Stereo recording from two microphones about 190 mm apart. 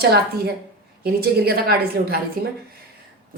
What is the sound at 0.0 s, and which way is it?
A woman's voice, 55° right (ahead or behind).